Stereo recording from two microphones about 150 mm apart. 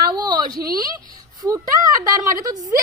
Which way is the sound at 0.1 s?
30° right (ahead or behind).